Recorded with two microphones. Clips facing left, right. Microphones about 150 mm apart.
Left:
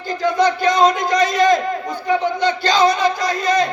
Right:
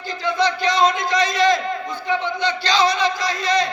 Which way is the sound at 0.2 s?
45° left (ahead or behind).